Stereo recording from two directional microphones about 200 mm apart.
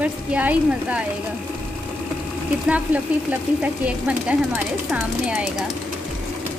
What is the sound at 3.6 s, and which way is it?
Speech, 5° right (ahead or behind).